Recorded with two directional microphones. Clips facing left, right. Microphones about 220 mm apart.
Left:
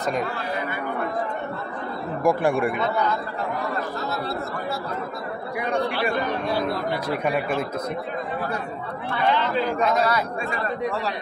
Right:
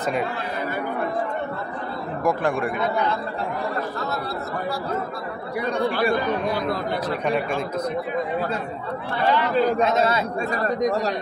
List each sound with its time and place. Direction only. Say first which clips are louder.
2.2 s speech: left 2 dB; 10° left (ahead or behind)
7.1 s speech: even; 5° left (ahead or behind)
9.5 s speech: right 4 dB; 35° right (ahead or behind)
9.8 s a man's voice: right 1 dB; 25° right (ahead or behind)
10.5 s speech: right 6 dB; 40° right (ahead or behind)